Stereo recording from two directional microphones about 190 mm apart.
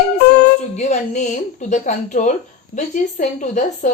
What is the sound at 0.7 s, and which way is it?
Speech, 40° left (ahead or behind).